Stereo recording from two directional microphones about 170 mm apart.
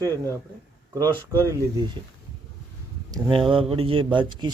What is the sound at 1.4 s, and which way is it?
Speech, 20° right (ahead or behind).